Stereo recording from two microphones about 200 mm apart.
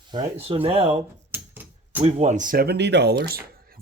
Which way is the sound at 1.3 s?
10° right (ahead or behind).